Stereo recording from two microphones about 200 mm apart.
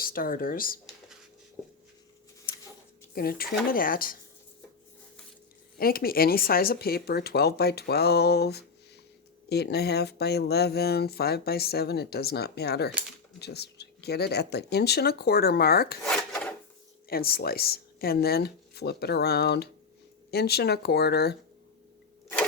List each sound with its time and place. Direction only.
0.0 s speech: 45° left (ahead or behind)
3.2 s speech: 50° left (ahead or behind)
5.7 s speech: 50° left (ahead or behind)
16.0 s filing: 5° left (ahead or behind)
17.1 s speech: 50° left (ahead or behind)